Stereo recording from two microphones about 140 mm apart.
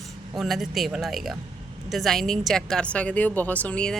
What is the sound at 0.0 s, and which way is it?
A woman's voice, centre (ahead or behind).